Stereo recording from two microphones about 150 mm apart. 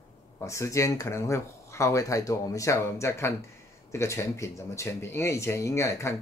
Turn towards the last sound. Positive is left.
turn(degrees=20)  # may be behind; listen again after turning